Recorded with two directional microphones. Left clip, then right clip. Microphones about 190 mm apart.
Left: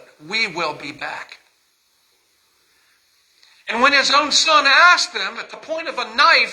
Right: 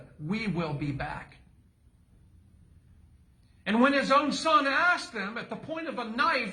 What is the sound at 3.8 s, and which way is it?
A man's voice, 35° left (ahead or behind).